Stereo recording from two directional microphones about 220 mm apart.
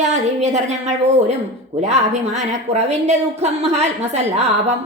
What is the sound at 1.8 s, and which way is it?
A woman's voice, 30° right (ahead or behind).